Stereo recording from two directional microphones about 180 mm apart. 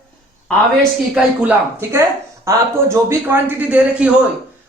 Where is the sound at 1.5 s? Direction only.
15° right (ahead or behind).